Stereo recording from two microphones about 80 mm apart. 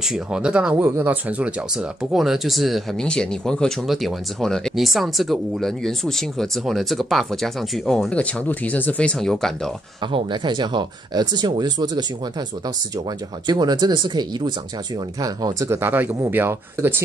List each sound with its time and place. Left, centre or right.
0.0 s speech: centre
0.7 s speech: right
1.4 s speech: centre
8.1 s speech: centre
10.1 s speech: right
15.1 s speech: right
15.7 s speech: right